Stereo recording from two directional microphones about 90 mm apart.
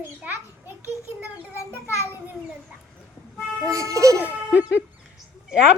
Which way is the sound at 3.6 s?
35° right (ahead or behind).